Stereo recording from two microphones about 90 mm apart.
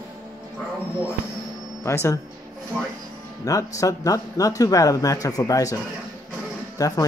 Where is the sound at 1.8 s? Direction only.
35° left (ahead or behind).